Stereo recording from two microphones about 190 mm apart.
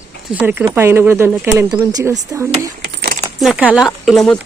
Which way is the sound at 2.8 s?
60° right (ahead or behind).